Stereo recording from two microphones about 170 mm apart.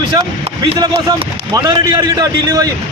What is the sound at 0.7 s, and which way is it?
Speech, 35° right (ahead or behind).